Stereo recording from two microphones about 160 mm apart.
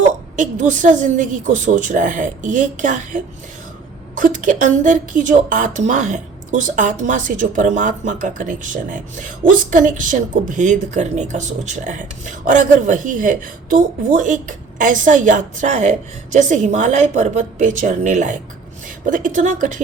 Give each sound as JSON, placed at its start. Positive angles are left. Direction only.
{"t": 0.3, "sound": "a woman's voice", "side_deg": -55}